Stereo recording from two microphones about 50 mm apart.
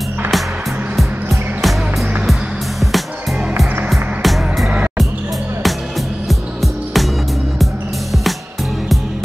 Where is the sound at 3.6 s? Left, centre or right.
Centre.